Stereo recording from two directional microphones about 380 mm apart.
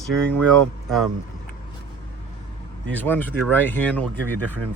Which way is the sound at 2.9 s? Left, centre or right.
Centre.